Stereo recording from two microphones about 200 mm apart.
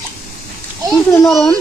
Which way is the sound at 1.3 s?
Centre (ahead or behind).